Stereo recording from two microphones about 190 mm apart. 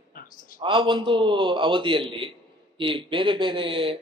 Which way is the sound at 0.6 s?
25° right (ahead or behind).